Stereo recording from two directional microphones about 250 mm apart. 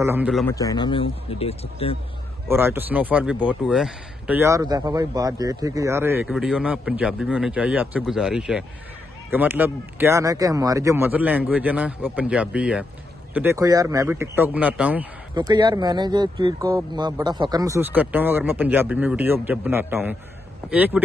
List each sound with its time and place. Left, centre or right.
0.0 s speech: centre
0.5 s speech: centre
2.4 s speech: centre
15.3 s speech: centre